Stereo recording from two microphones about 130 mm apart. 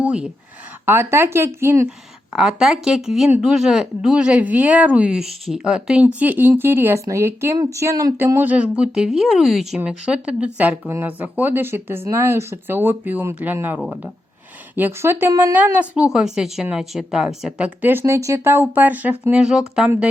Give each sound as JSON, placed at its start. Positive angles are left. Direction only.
{"t": 0.0, "sound": "speech", "side_deg": -10}
{"t": 2.3, "sound": "speech", "side_deg": -5}
{"t": 13.7, "sound": "speech", "side_deg": 0}
{"t": 14.8, "sound": "speech", "side_deg": -15}